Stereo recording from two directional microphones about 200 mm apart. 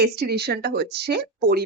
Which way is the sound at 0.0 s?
50° right (ahead or behind).